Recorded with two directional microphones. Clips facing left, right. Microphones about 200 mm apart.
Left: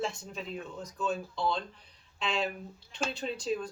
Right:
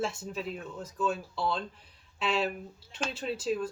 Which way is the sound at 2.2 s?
5° right (ahead or behind).